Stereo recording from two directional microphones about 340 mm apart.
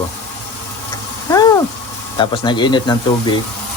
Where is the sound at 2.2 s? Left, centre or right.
Centre.